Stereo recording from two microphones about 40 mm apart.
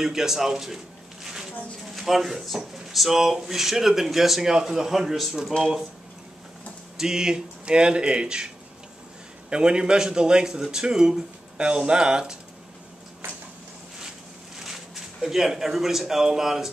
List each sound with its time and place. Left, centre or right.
0.0 s speech: centre
1.2 s a sound: centre
2.0 s speech: centre
7.0 s a man's voice: centre
9.5 s a man's voice: right
14.6 s speech: centre